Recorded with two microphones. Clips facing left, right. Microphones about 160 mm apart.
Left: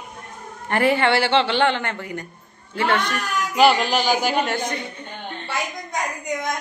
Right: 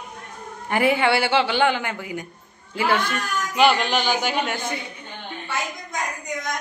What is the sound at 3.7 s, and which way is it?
Speech, 40° left (ahead or behind).